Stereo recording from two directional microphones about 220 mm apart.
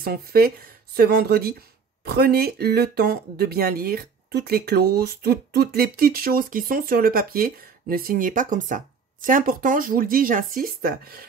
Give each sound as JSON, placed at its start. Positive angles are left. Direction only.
{"t": 0.0, "sound": "speech", "side_deg": -45}